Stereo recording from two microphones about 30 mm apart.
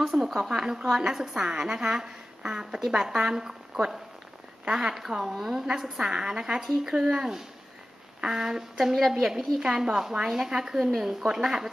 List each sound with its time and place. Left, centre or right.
0.2 s speech: centre
0.5 s a woman's voice: right
6.0 s a woman's voice: right
6.6 s a woman's voice: centre
8.9 s speech: centre
9.6 s a woman's voice: right